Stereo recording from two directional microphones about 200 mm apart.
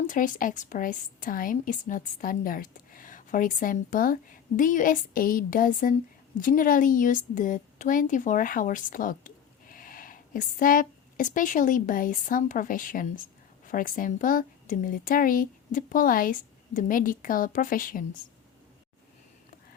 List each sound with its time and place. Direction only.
0.1 s a woman's voice: 45° left (ahead or behind)